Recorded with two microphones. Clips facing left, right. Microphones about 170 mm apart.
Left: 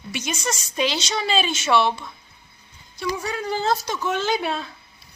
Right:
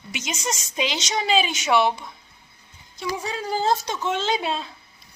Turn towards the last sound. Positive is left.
turn(degrees=-25)  # may be behind; listen again after turning